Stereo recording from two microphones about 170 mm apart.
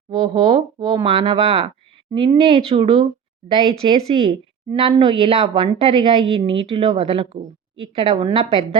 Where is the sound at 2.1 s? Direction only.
30° right (ahead or behind).